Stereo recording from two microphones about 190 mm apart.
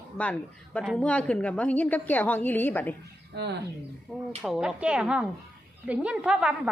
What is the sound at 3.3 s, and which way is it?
Speech, 65° right (ahead or behind).